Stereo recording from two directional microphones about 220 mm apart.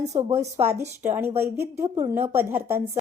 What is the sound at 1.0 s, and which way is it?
A woman's voice, 10° right (ahead or behind).